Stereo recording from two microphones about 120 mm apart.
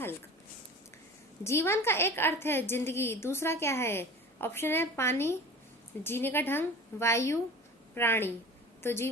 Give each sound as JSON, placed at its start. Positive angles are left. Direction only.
{"t": 1.5, "sound": "a woman's voice", "side_deg": 20}